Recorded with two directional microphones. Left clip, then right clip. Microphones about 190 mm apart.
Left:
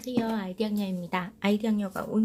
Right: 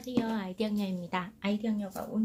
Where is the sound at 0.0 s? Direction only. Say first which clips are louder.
Left 3 dB; 15° left (ahead or behind).